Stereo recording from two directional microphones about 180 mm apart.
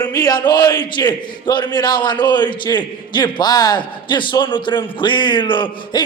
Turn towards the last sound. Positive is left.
turn(degrees=25)  # may be behind; listen again after turning